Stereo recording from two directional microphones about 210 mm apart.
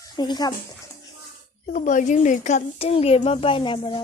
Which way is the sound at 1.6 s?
35° left (ahead or behind).